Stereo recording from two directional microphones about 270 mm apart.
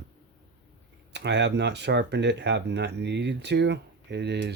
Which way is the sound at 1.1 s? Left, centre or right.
Right.